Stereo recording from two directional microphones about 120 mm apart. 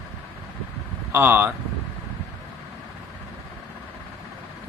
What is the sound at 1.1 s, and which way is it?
Speech, 20° right (ahead or behind).